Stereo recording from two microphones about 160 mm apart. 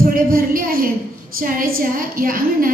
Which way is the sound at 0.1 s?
65° right (ahead or behind).